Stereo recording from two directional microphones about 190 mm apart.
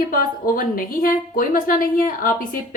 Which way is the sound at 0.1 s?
45° left (ahead or behind).